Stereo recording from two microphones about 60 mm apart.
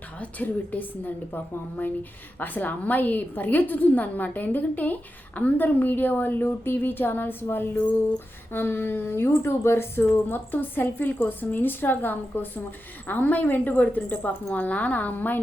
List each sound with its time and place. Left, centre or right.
0.2 s a woman's voice: left